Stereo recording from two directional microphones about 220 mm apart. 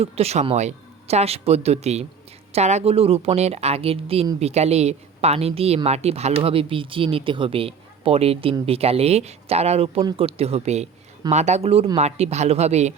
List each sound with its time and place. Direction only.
0.0 s speech: 30° right (ahead or behind)